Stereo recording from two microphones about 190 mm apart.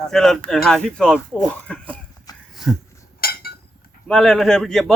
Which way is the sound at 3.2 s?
55° left (ahead or behind).